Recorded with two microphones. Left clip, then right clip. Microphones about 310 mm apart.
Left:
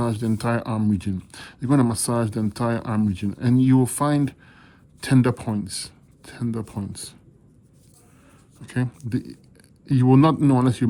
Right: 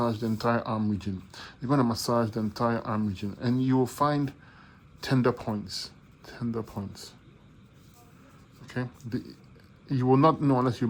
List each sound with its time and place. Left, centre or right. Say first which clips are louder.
0.0 s speech: left 2 dB; left
8.6 s speech: left 6 dB; left